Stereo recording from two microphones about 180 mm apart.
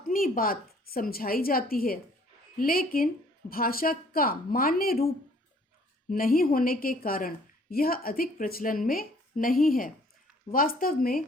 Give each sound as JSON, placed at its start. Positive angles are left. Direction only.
{"t": 0.0, "sound": "a woman's voice", "side_deg": 50}